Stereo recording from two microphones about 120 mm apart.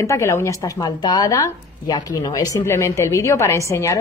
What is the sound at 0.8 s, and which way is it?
A woman's voice, 35° left (ahead or behind).